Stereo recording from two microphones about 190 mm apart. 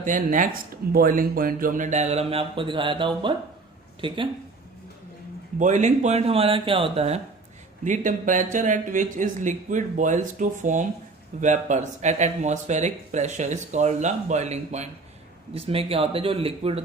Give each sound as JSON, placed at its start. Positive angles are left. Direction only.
{"t": 0.0, "sound": "speech", "side_deg": -45}
{"t": 5.5, "sound": "speech", "side_deg": -40}
{"t": 7.9, "sound": "speech", "side_deg": -45}